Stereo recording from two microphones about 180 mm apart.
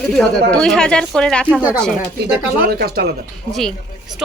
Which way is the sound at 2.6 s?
60° right (ahead or behind).